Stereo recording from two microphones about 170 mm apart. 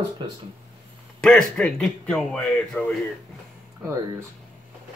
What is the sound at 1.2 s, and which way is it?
Speech, 5° left (ahead or behind).